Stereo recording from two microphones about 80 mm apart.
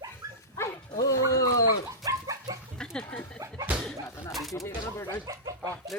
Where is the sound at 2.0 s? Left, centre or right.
Right.